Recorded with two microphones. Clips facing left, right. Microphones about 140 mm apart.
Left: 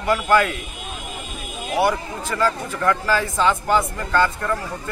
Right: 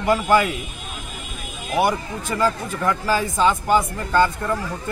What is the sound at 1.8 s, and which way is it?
Speech, 15° right (ahead or behind).